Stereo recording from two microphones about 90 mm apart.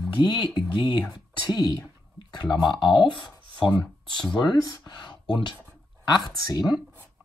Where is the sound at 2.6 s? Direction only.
60° left (ahead or behind).